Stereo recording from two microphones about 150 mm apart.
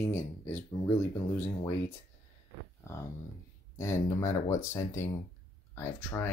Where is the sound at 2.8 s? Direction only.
20° left (ahead or behind).